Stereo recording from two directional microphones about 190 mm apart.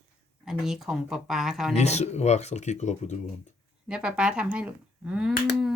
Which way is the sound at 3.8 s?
5° right (ahead or behind).